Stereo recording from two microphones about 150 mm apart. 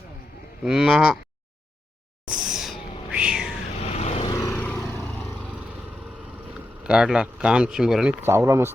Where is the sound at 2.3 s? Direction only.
5° right (ahead or behind).